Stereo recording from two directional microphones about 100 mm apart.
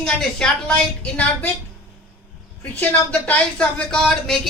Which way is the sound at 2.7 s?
15° left (ahead or behind).